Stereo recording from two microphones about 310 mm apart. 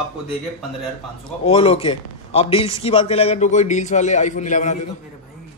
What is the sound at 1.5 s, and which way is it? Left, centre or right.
A man's voice, centre.